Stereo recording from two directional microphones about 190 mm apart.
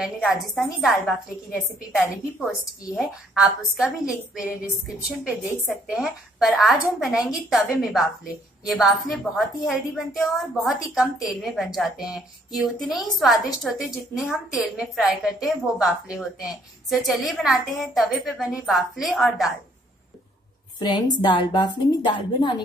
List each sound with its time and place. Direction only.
0.0 s a woman's voice: centre (ahead or behind)
21.2 s a woman's voice: 25° left (ahead or behind)